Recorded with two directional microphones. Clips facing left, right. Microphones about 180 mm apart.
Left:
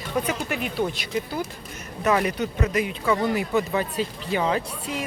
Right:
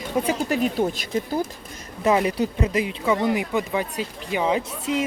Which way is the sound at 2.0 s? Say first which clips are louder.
Right 2 dB; 25° right (ahead or behind).